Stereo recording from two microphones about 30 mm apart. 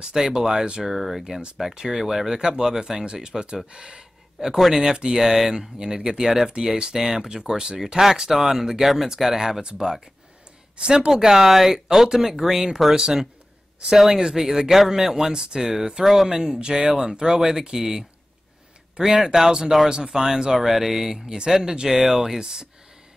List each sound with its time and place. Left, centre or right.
0.1 s speech: right
0.8 s speech: centre
2.3 s speech: right
10.8 s speech: right
11.1 s speech: centre
13.9 s speech: centre
20.5 s speech: centre
22.4 s speech: right